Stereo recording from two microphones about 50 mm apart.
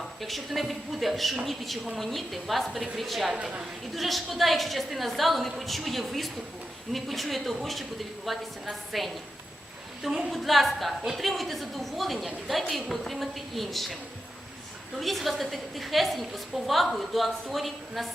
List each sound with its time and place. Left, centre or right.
0.2 s a woman's voice: centre
14.9 s a woman's voice: centre